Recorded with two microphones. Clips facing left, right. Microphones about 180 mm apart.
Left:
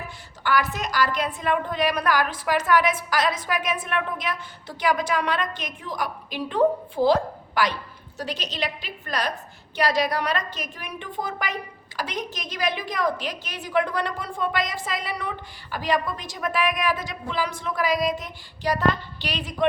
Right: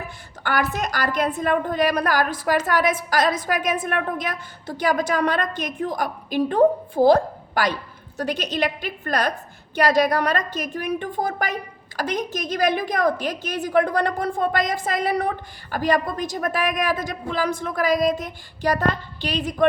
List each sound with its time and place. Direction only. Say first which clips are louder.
0.4 s a woman's voice: right 1 dB; 50° right (ahead or behind)